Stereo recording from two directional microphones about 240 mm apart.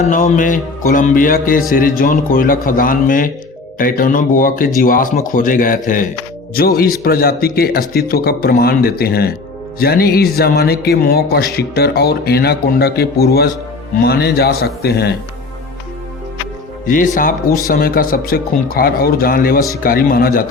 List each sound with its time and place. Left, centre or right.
0.0 s speech: left
16.8 s speech: left